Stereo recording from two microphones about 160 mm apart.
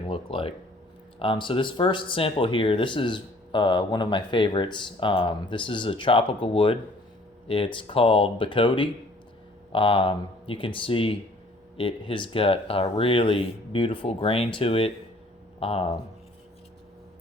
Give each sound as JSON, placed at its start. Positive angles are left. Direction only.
{"t": 0.1, "sound": "speech", "side_deg": 35}